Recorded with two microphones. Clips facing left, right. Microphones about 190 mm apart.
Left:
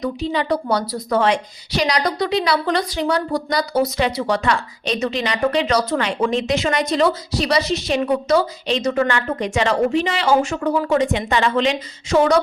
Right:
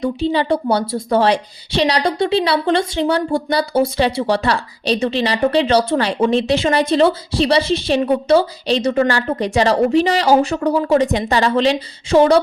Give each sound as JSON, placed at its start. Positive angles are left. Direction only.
{"t": 0.0, "sound": "a woman's voice", "side_deg": -30}